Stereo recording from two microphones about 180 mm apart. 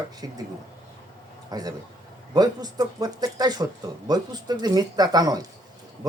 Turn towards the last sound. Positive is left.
turn(degrees=-20)  # may be behind; listen again after turning